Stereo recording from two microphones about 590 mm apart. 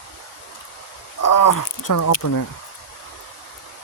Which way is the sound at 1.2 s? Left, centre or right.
Left.